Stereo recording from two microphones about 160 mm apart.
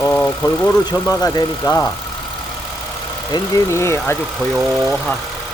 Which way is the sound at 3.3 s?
15° left (ahead or behind).